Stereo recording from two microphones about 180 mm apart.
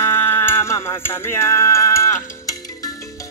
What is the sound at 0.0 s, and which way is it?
Music, 10° left (ahead or behind).